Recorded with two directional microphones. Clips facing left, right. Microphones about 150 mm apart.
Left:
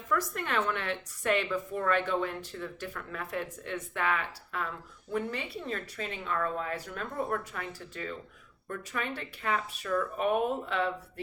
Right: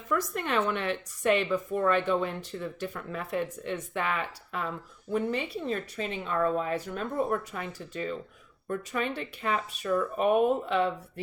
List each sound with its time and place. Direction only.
0.1 s a woman's voice: 20° right (ahead or behind)
5.1 s a woman's voice: 25° right (ahead or behind)